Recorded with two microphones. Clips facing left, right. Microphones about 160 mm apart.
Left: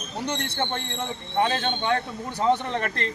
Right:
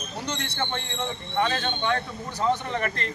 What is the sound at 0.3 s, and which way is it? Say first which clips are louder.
Speech: left 3 dB; 55° left (ahead or behind).